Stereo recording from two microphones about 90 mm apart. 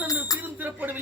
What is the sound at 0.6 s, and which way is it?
Speech, 20° right (ahead or behind).